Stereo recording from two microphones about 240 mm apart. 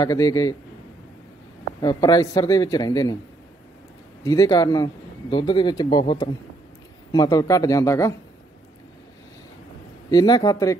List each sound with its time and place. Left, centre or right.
0.0 s speech: centre
1.8 s speech: centre
4.2 s speech: centre
10.0 s speech: centre